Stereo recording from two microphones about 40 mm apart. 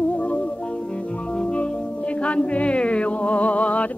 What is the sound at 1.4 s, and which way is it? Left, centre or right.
Music, left.